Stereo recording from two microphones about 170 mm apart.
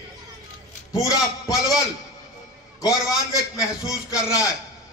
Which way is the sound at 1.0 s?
20° left (ahead or behind).